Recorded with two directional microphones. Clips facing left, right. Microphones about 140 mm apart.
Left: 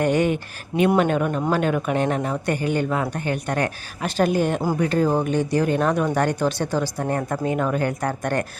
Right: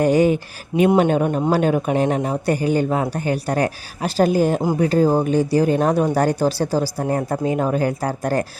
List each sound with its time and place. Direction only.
0.0 s speech: 35° right (ahead or behind)